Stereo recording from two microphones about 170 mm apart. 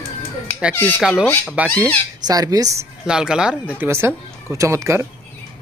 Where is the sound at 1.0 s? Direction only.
Centre (ahead or behind).